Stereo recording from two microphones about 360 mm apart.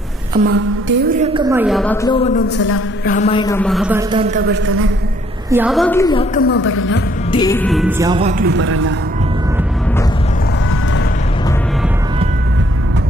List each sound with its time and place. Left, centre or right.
0.4 s music: right
1.2 s a woman's voice: centre
2.0 s a man's voice: centre; by 4.6 s right
5.5 s a woman's voice: centre
6.3 s a woman's voice: left
7.2 s a woman's voice: centre
8.1 s music: centre; by 8.9 s right